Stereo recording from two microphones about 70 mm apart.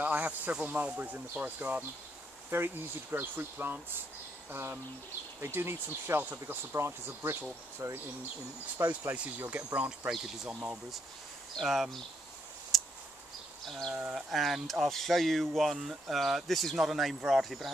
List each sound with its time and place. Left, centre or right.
0.0 s speech: right
8.8 s speech: right; by 10.5 s centre
10.5 s speech: centre
11.6 s speech: centre
12.7 s a sound: centre
13.7 s insect: centre
13.9 s speech: centre